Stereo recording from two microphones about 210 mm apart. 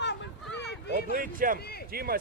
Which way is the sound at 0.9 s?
40° right (ahead or behind).